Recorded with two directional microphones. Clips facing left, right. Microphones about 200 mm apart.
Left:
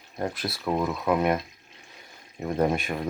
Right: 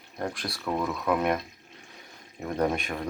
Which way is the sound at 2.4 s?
15° left (ahead or behind).